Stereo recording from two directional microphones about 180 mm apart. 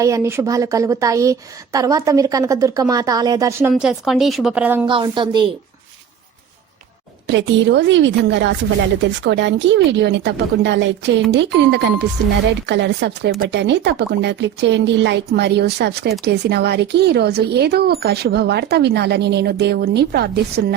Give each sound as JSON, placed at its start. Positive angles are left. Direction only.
{"t": 0.0, "sound": "a woman's voice", "side_deg": -15}
{"t": 3.7, "sound": "speech", "side_deg": -5}
{"t": 4.9, "sound": "a woman's voice", "side_deg": -25}
{"t": 7.3, "sound": "a woman's voice", "side_deg": -85}